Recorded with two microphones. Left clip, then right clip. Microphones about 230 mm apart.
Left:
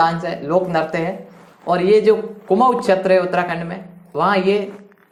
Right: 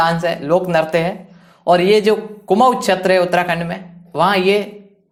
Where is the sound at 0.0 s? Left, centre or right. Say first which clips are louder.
Right 2 dB; right.